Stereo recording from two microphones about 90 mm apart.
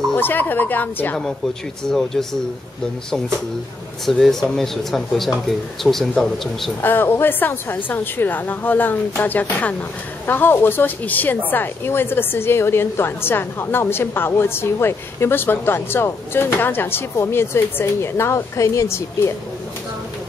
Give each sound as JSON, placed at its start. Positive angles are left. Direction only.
{"t": 0.2, "sound": "speech", "side_deg": 20}
{"t": 1.9, "sound": "speech", "side_deg": 5}
{"t": 4.0, "sound": "speech", "side_deg": 0}
{"t": 6.8, "sound": "speech", "side_deg": 25}